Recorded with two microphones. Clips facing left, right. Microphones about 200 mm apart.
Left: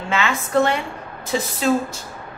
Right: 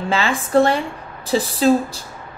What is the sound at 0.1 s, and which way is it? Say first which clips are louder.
A woman's voice: right 3 dB; 35° right (ahead or behind).